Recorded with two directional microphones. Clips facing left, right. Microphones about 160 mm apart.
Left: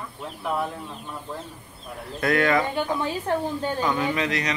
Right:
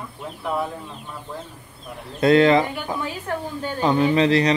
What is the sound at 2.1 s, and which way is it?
Speech, 25° right (ahead or behind).